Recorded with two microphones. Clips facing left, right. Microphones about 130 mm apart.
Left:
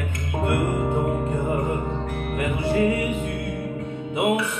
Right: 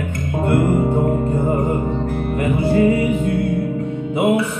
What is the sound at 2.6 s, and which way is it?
Music, 40° right (ahead or behind).